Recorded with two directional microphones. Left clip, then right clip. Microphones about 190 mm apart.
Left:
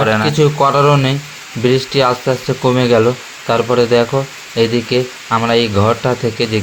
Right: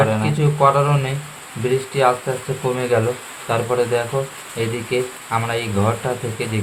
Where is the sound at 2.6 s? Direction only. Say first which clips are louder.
Left 7 dB; 40° left (ahead or behind).